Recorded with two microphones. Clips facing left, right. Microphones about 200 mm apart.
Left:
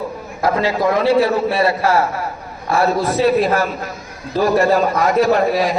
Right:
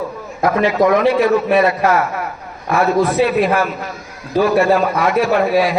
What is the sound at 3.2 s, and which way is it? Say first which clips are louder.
A man's voice: left 1 dB; 35° left (ahead or behind).